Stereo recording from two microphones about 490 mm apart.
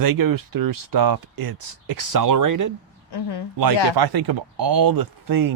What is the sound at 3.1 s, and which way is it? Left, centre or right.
Speech, left.